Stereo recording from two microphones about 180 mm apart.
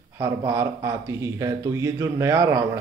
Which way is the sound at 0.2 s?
20° right (ahead or behind).